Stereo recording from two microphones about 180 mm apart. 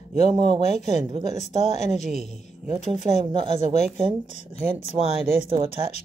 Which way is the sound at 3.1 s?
25° right (ahead or behind).